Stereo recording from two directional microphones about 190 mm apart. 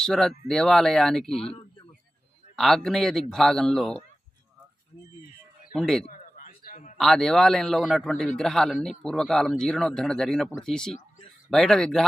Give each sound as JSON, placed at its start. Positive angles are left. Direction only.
{"t": 0.0, "sound": "a man's voice", "side_deg": 5}
{"t": 2.6, "sound": "a man's voice", "side_deg": 0}
{"t": 5.7, "sound": "a man's voice", "side_deg": 0}
{"t": 6.1, "sound": "a sound", "side_deg": 45}
{"t": 7.0, "sound": "a man's voice", "side_deg": 0}